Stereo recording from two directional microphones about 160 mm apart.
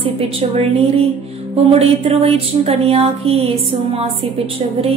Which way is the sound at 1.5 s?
40° right (ahead or behind).